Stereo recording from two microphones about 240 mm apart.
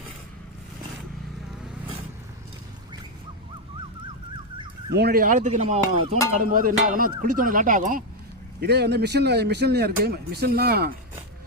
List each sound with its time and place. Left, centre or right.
4.5 s dog: centre
4.9 s speech: right
8.6 s speech: right